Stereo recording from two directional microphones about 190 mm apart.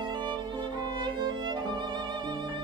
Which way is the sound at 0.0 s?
25° right (ahead or behind).